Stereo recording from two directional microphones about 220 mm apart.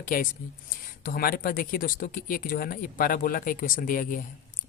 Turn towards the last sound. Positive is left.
turn(degrees=35)  # may be behind; listen again after turning